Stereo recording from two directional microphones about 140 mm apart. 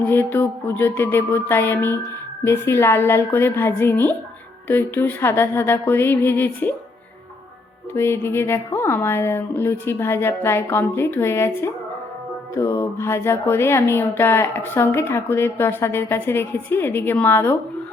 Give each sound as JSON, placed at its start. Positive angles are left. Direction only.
{"t": 0.0, "sound": "speech", "side_deg": 15}
{"t": 7.9, "sound": "speech", "side_deg": 15}